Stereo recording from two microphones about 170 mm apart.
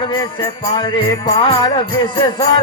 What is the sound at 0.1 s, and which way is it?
Music, 30° left (ahead or behind).